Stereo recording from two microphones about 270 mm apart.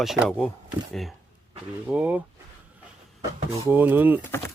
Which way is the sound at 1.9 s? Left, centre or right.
Centre.